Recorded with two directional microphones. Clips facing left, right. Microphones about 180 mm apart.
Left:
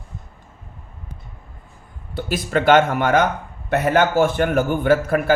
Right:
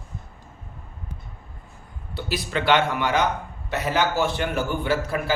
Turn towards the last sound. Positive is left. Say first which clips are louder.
# left 7 dB
turn(degrees=50)  # may be behind; listen again after turning